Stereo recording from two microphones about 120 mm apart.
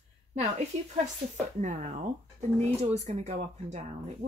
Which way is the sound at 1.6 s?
90° right.